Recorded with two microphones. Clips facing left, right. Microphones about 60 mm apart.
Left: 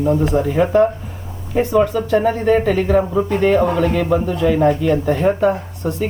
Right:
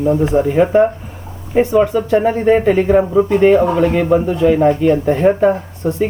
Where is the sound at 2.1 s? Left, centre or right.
Right.